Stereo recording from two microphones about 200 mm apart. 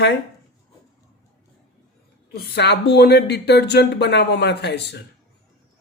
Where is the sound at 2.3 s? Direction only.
55° left (ahead or behind).